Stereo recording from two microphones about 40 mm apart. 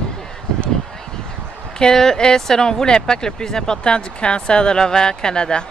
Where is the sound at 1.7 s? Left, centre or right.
Centre.